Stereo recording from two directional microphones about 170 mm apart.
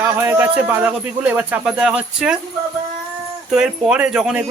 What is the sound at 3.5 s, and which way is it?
Speech, 5° right (ahead or behind).